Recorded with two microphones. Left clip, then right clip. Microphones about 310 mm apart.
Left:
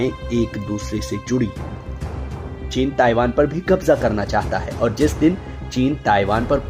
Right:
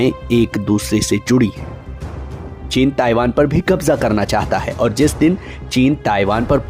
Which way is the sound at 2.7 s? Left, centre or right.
Centre.